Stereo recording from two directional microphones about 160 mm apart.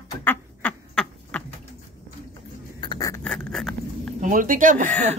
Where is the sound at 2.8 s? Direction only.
25° left (ahead or behind).